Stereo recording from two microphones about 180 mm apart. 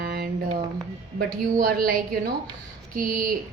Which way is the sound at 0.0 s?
55° right (ahead or behind).